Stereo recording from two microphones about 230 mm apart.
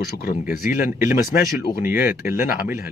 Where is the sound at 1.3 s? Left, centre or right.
Left.